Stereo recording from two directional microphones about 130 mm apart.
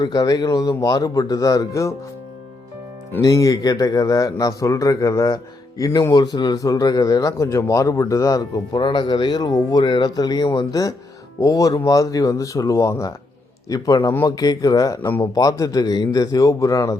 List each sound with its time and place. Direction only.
0.0 s speech: 30° left (ahead or behind)
3.2 s speech: 25° left (ahead or behind)